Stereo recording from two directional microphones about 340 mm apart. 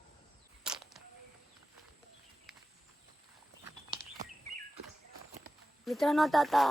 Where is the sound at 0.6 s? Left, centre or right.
Centre.